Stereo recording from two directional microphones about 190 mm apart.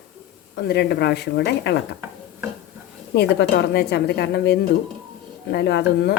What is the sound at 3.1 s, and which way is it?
A woman's voice, 60° left (ahead or behind).